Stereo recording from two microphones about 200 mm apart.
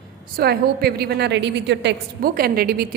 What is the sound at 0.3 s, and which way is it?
A woman's voice, 50° right (ahead or behind).